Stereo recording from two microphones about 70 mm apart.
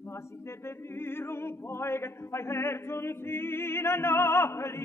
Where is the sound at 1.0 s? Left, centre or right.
Left.